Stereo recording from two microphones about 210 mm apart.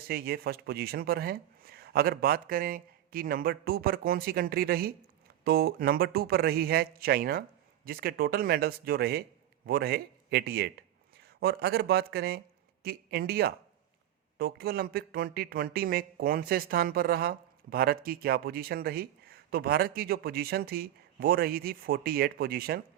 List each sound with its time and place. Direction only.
0.1 s a man's voice: 45° right (ahead or behind)